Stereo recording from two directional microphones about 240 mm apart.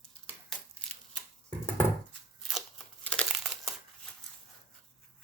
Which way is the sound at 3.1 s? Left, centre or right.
Centre.